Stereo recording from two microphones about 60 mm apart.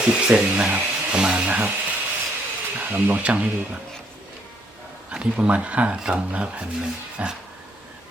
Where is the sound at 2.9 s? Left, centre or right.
Right.